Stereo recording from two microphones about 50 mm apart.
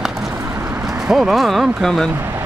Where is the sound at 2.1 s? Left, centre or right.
Right.